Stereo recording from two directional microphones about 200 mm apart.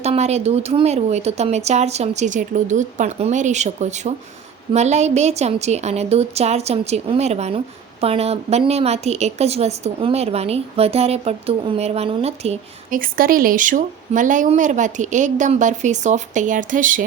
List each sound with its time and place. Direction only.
0.0 s speech: 30° right (ahead or behind)
13.0 s speech: 45° right (ahead or behind)